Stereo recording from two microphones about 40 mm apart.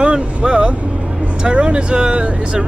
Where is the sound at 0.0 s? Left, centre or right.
Right.